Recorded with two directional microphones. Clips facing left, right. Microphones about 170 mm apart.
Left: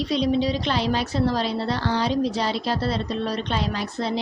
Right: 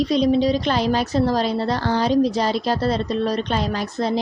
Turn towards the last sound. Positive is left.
turn(degrees=-45)  # may be behind; listen again after turning